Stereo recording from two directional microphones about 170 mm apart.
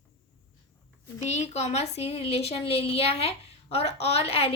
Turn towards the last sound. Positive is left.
turn(degrees=35)  # may be behind; listen again after turning